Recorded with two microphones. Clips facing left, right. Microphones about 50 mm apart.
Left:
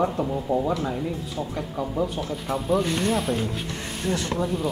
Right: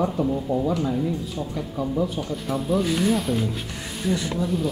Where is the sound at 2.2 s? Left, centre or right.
Centre.